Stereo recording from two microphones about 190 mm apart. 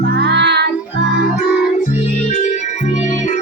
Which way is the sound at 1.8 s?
40° left (ahead or behind).